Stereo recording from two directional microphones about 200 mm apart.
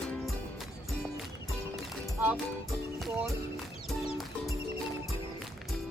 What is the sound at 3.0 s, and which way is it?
Music, centre (ahead or behind).